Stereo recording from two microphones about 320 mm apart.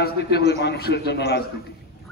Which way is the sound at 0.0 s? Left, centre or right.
Left.